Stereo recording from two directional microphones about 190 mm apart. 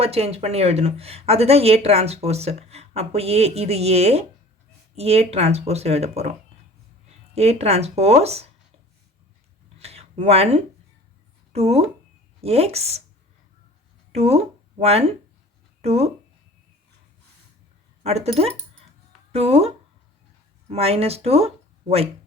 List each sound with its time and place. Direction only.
0.0 s speech: 30° right (ahead or behind)
7.3 s speech: 35° right (ahead or behind)
9.7 s a sound: 35° right (ahead or behind)
11.5 s speech: 35° right (ahead or behind)
14.1 s speech: 35° right (ahead or behind)
18.0 s speech: 35° right (ahead or behind)